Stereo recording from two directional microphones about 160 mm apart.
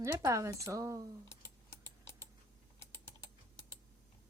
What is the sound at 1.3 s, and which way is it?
Typing, 15° left (ahead or behind).